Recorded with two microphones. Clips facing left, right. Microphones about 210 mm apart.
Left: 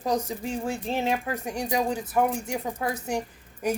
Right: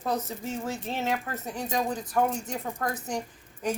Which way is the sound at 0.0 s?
15° left (ahead or behind).